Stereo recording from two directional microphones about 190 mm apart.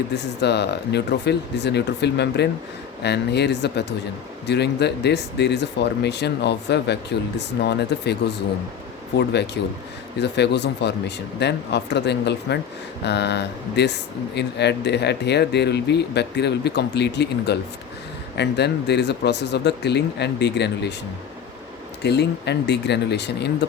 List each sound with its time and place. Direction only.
0.1 s speech: 65° left (ahead or behind)
9.1 s speech: 60° left (ahead or behind)
22.0 s speech: 60° left (ahead or behind)